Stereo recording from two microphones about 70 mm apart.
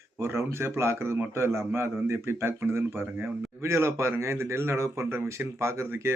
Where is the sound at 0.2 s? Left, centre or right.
Right.